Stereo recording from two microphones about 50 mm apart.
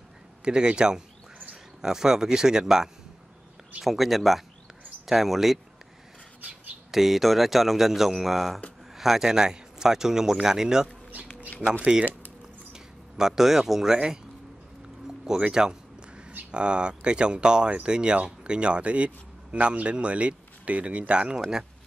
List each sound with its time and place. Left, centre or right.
0.5 s speech: centre
6.9 s speech: centre
11.8 s speech: right
12.7 s speech: centre
15.2 s a sound: centre
16.3 s speech: right